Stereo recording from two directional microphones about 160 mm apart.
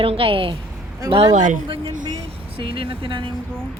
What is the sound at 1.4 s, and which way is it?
Speech, 55° right (ahead or behind).